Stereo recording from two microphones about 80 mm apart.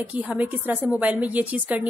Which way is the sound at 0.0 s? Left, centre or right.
Centre.